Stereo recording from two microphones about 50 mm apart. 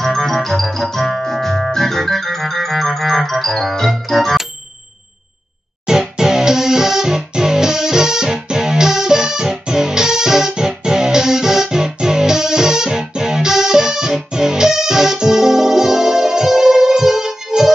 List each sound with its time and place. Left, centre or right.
0.0 s organ: centre
5.9 s music: centre